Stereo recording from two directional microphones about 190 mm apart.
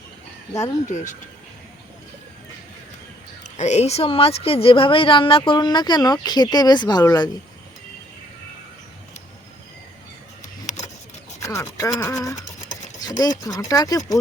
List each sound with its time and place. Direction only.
0.9 s speech: 40° left (ahead or behind)
3.6 s speech: 35° left (ahead or behind); by 7.3 s 20° left (ahead or behind)
10.4 s a sound: 40° left (ahead or behind)
11.3 s speech: 15° left (ahead or behind)